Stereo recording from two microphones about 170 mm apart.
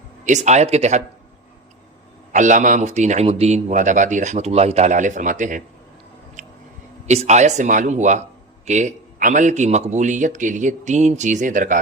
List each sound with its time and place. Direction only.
0.3 s speech: 45° right (ahead or behind)
2.3 s speech: 45° right (ahead or behind)
6.4 s a sound: 45° right (ahead or behind)
7.1 s speech: 40° right (ahead or behind)